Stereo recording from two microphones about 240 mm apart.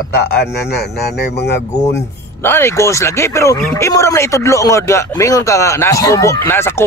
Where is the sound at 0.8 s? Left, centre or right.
Left.